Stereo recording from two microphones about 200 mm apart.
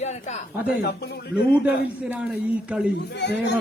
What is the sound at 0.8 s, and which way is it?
Speech, 50° left (ahead or behind).